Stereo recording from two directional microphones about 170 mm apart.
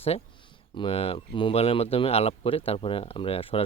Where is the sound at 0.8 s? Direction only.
35° left (ahead or behind).